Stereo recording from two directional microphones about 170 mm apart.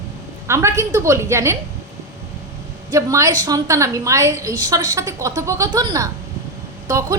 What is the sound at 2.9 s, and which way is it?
A woman's voice, 20° right (ahead or behind).